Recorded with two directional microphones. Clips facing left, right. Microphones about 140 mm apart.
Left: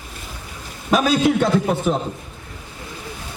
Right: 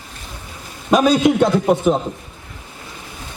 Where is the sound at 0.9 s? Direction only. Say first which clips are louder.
Right 3 dB; centre (ahead or behind).